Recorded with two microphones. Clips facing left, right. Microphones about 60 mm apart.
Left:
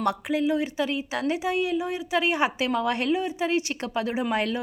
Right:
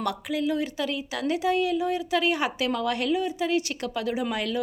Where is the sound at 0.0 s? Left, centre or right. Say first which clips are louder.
Left 3 dB; left.